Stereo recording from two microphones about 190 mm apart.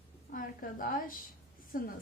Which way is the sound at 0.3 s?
45° left (ahead or behind).